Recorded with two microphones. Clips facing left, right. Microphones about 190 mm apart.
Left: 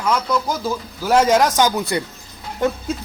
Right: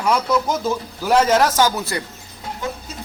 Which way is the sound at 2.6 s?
55° left (ahead or behind).